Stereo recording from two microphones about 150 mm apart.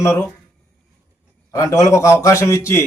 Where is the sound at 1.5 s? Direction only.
20° left (ahead or behind).